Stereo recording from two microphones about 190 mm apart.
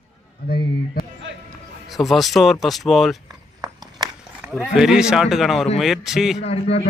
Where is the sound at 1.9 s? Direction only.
Centre (ahead or behind).